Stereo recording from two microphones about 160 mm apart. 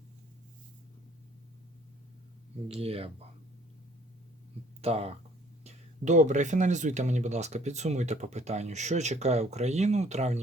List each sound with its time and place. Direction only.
2.8 s speech: 40° right (ahead or behind)
4.8 s speech: 40° right (ahead or behind)